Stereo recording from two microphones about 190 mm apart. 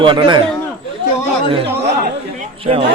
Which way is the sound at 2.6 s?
30° right (ahead or behind).